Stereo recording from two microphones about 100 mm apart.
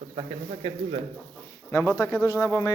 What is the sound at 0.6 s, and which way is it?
Speech, 65° right (ahead or behind).